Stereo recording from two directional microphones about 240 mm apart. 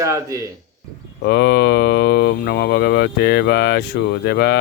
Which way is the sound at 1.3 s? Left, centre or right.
Left.